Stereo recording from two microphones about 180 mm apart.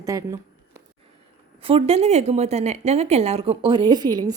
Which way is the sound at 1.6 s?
30° right (ahead or behind).